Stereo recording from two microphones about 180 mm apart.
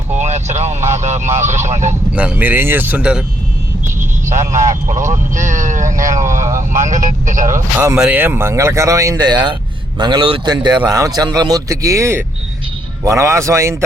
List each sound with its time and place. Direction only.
0.1 s vehicle: 40° right (ahead or behind)
0.9 s speech: 40° right (ahead or behind)
2.1 s speech: 10° right (ahead or behind)
4.5 s speech: 15° right (ahead or behind)
4.9 s speech: 45° right (ahead or behind)
7.8 s a man's voice: 10° right (ahead or behind)